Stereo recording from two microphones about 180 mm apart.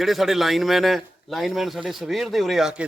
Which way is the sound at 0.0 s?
Centre (ahead or behind).